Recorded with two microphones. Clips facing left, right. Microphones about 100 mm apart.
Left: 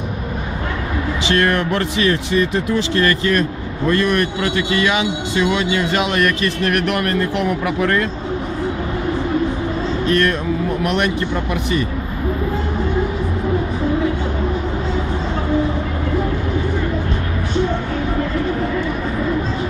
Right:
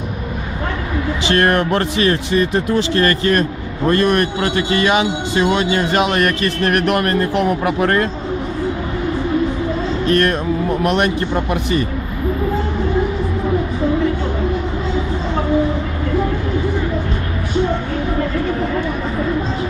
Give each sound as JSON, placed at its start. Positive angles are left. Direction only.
{"t": 1.3, "sound": "a man's voice", "side_deg": -45}
{"t": 10.1, "sound": "a man's voice", "side_deg": -45}